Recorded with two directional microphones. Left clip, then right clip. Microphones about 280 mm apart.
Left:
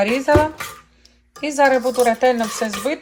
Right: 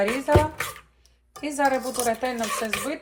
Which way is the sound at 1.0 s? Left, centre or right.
Left.